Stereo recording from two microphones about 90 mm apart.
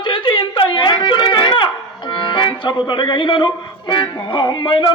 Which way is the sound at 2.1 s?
65° left (ahead or behind).